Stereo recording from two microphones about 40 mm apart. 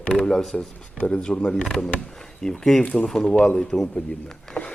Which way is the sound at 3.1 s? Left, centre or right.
Centre.